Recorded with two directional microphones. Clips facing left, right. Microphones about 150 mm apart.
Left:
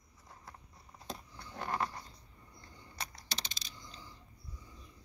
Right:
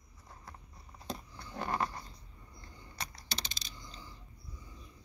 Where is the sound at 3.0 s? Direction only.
Centre (ahead or behind).